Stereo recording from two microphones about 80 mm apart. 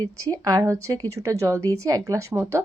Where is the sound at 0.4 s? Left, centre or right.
Right.